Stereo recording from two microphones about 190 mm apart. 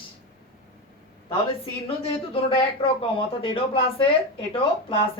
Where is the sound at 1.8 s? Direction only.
30° left (ahead or behind).